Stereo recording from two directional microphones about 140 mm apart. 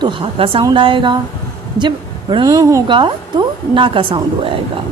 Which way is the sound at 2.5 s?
20° right (ahead or behind).